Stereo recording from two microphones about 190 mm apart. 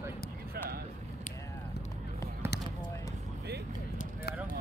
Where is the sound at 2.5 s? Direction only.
60° left (ahead or behind).